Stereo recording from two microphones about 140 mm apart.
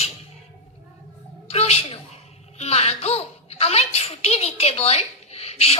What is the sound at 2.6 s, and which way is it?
Speech, 50° left (ahead or behind).